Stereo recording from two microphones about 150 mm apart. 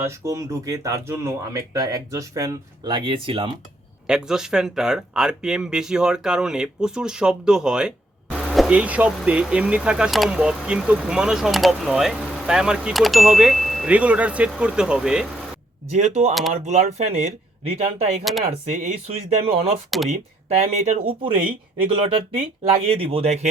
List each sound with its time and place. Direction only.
0.0 s speech: 20° right (ahead or behind)
4.0 s speech: 5° right (ahead or behind)
15.9 s speech: 50° right (ahead or behind)
19.9 s speech: centre (ahead or behind)
20.6 s speech: 45° right (ahead or behind)
23.0 s speech: 40° right (ahead or behind)